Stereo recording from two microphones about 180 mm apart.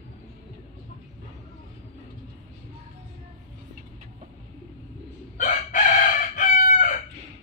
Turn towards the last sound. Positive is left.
turn(degrees=45)  # may be behind; listen again after turning